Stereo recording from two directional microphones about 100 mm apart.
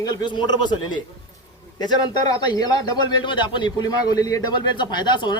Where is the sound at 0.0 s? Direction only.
45° left (ahead or behind).